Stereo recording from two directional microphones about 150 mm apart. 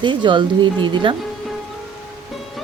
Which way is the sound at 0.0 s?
30° right (ahead or behind).